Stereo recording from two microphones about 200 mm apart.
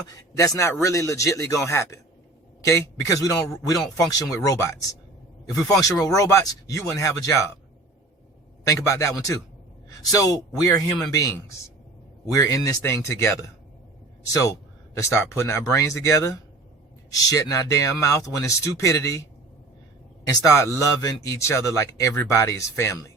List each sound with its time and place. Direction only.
0.1 s speech: 15° left (ahead or behind)
6.1 s speech: 15° left (ahead or behind)
8.6 s speech: 15° left (ahead or behind)
14.9 s speech: 15° left (ahead or behind)
20.2 s speech: 15° left (ahead or behind)